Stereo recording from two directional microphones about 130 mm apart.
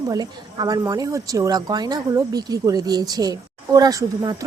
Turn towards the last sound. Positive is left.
turn(degrees=-30)  # may be behind; listen again after turning